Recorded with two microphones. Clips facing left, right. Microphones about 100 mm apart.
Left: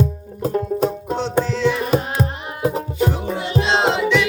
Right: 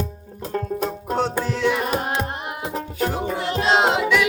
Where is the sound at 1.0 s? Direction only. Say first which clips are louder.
Right 1 dB; 45° right (ahead or behind).